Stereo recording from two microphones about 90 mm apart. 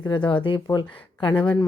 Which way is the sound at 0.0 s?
60° left (ahead or behind).